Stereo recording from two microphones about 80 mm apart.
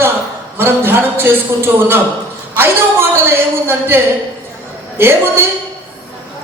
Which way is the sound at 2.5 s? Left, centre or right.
Right.